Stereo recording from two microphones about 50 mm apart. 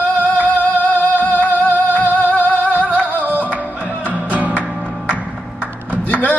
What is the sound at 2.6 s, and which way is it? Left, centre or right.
Flamenco, right.